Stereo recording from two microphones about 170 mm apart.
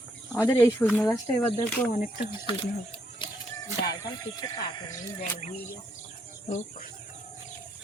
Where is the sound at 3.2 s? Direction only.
30° left (ahead or behind).